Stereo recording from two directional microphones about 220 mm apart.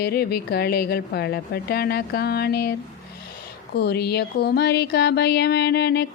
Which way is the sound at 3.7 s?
45° left (ahead or behind).